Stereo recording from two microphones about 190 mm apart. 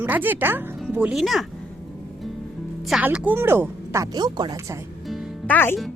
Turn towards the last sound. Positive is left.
turn(degrees=0)  # may be behind; listen again after turning